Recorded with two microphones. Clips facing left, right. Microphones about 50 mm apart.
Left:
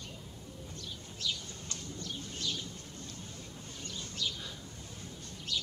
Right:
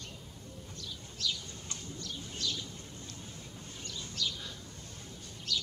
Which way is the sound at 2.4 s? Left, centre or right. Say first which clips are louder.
Right 1 dB; centre.